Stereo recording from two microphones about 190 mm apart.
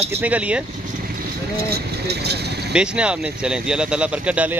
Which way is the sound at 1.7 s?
60° right (ahead or behind).